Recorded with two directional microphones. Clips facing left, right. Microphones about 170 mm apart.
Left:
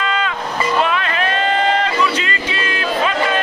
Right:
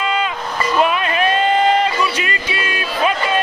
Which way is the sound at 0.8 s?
15° right (ahead or behind).